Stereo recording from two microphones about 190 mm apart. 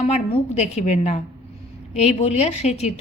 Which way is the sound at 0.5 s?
35° left (ahead or behind).